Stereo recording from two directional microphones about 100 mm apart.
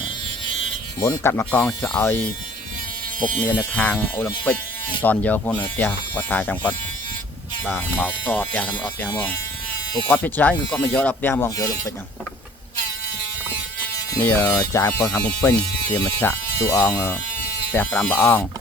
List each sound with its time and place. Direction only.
0.9 s speech: 25° left (ahead or behind)
3.7 s speech: 15° left (ahead or behind)
10.1 s speech: 20° left (ahead or behind)
11.5 s speech: 35° left (ahead or behind)
14.2 s speech: 20° left (ahead or behind)
17.7 s speech: 20° left (ahead or behind)